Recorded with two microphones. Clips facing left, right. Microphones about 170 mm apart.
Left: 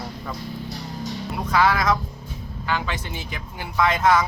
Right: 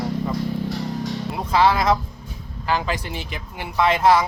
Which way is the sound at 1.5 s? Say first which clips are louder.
Right 2 dB; 30° right (ahead or behind).